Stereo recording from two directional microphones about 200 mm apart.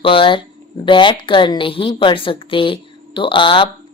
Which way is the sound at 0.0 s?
25° left (ahead or behind).